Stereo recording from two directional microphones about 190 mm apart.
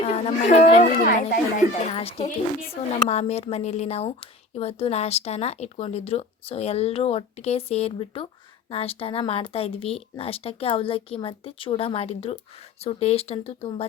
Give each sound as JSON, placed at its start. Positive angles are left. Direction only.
{"t": 0.0, "sound": "a woman's voice", "side_deg": 35}
{"t": 1.9, "sound": "a woman's voice", "side_deg": 30}